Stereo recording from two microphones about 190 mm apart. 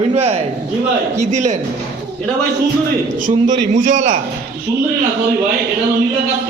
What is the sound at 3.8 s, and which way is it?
Speech, 40° right (ahead or behind).